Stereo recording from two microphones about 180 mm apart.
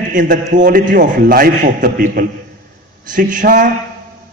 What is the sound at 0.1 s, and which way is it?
A man's voice, 45° right (ahead or behind).